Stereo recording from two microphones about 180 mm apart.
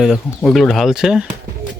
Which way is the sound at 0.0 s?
Centre (ahead or behind).